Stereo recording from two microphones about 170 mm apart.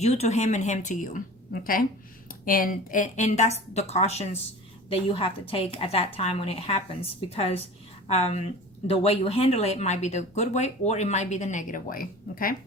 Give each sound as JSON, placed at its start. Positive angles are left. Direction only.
{"t": 0.0, "sound": "a woman's voice", "side_deg": 40}
{"t": 2.4, "sound": "a woman's voice", "side_deg": 55}